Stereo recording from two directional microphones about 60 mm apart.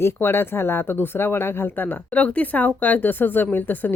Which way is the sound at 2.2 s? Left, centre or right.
Left.